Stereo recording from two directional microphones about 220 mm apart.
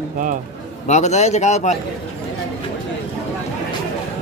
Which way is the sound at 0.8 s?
30° left (ahead or behind).